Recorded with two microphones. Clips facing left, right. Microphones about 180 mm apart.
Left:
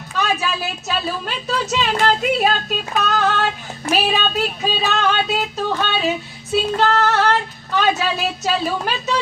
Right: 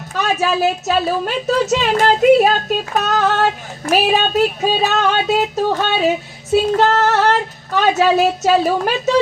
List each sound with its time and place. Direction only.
0.1 s a woman's voice: 45° right (ahead or behind)
6.5 s child singing: 45° right (ahead or behind)